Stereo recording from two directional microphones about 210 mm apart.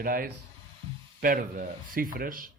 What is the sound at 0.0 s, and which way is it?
A man's voice, 45° right (ahead or behind).